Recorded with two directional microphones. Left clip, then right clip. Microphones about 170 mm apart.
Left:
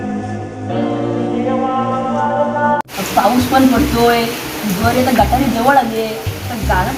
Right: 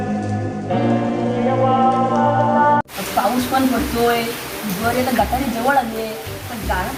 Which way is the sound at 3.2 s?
Centre (ahead or behind).